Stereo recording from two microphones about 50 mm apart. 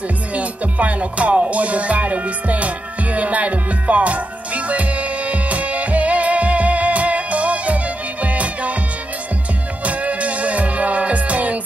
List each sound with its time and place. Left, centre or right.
0.3 s music: right
9.8 s music: right